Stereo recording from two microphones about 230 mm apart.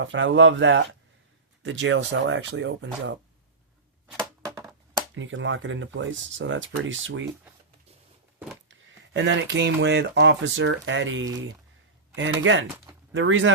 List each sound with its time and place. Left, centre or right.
0.0 s speech: right
4.4 s a sound: centre
5.1 s speech: right
8.7 s speech: right